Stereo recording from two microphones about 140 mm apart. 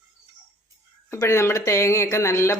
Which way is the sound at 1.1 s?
20° left (ahead or behind).